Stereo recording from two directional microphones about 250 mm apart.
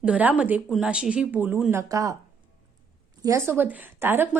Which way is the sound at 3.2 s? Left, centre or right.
Centre.